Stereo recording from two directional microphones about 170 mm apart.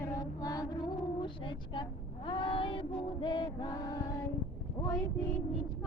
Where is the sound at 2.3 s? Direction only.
30° left (ahead or behind).